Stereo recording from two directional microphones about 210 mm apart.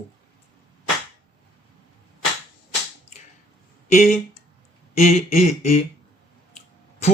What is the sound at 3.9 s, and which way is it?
Speech, 35° left (ahead or behind).